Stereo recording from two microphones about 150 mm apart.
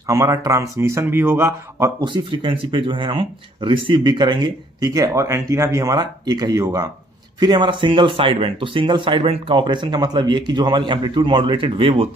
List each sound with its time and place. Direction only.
0.0 s speech: 20° right (ahead or behind)
2.0 s speech: 35° right (ahead or behind)